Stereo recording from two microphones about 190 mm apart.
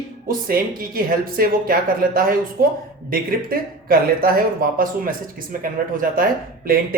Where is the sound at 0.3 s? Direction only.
50° right (ahead or behind).